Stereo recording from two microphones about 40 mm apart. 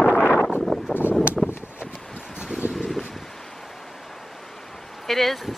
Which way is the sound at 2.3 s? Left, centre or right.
Right.